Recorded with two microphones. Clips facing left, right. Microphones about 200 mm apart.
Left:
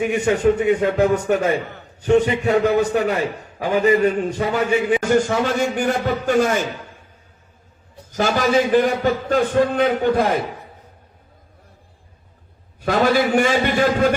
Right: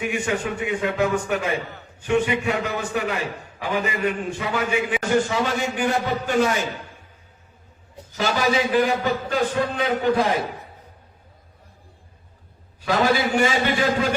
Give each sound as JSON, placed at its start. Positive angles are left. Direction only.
{"t": 0.0, "sound": "a man's voice", "side_deg": 40}
{"t": 8.1, "sound": "a man's voice", "side_deg": 45}
{"t": 12.8, "sound": "a man's voice", "side_deg": 55}